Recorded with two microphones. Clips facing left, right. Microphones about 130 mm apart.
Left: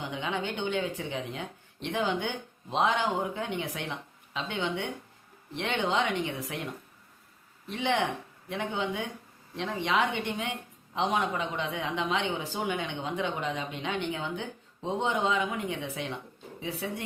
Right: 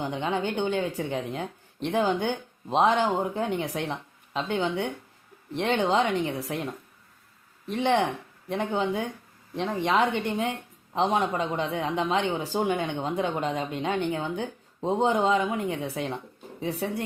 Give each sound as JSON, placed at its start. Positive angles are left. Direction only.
{"t": 0.0, "sound": "speech", "side_deg": -40}
{"t": 7.7, "sound": "speech", "side_deg": -40}